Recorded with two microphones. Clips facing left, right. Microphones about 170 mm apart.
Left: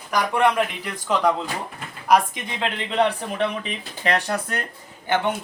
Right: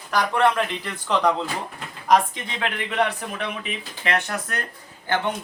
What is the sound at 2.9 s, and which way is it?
Speech, 30° left (ahead or behind).